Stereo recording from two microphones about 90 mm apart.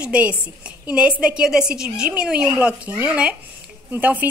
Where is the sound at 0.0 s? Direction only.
15° right (ahead or behind).